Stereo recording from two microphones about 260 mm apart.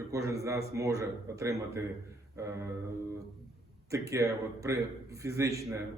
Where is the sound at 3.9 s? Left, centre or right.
Centre.